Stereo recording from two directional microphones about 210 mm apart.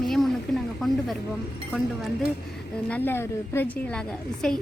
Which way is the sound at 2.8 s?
10° left (ahead or behind).